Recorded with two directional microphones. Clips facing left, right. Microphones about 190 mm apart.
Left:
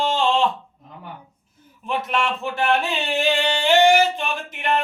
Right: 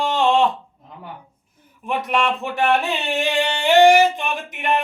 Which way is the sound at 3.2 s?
15° right (ahead or behind).